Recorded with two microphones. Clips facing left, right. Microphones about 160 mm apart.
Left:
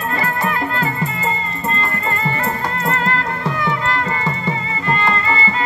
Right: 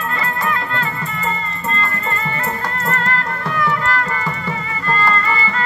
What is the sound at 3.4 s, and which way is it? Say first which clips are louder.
Music: right 2 dB; 25° left (ahead or behind).